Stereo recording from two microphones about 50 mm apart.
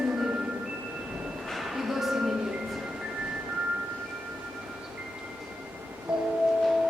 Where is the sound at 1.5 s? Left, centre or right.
Centre.